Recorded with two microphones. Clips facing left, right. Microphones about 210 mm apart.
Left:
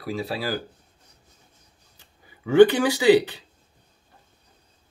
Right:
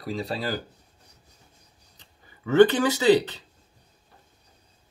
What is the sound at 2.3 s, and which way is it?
Speech, 10° left (ahead or behind).